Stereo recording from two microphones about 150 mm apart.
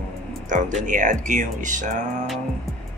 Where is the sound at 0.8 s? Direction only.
60° right (ahead or behind).